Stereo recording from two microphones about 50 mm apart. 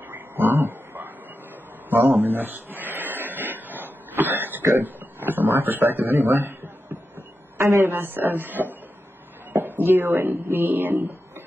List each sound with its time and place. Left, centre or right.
0.1 s dog: right
1.9 s a sound: right
7.8 s speech: right